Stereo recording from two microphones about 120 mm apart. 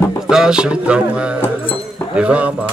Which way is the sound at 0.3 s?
5° right (ahead or behind).